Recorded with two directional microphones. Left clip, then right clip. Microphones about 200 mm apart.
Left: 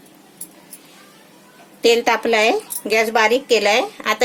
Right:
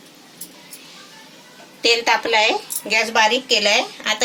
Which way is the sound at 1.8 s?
60° left (ahead or behind).